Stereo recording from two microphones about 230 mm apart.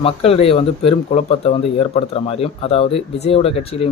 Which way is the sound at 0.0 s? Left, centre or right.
Left.